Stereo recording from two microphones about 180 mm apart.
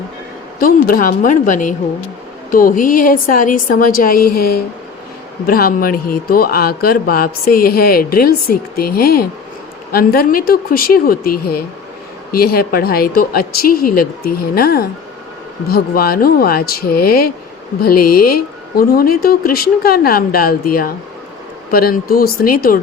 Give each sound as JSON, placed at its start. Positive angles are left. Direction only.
{"t": 0.6, "sound": "a woman's voice", "side_deg": 50}